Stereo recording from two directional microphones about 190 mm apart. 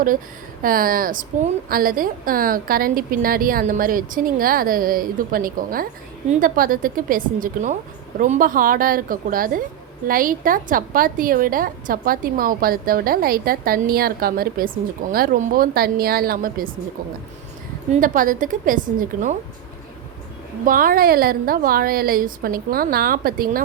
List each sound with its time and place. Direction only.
0.6 s a woman's voice: 50° right (ahead or behind)
17.9 s a woman's voice: 45° right (ahead or behind)
20.7 s a woman's voice: 45° right (ahead or behind)